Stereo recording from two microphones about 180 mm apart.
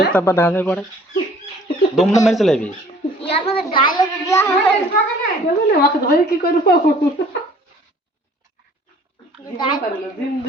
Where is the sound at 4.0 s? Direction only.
15° left (ahead or behind).